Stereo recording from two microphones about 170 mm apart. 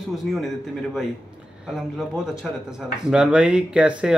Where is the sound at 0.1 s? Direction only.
Centre (ahead or behind).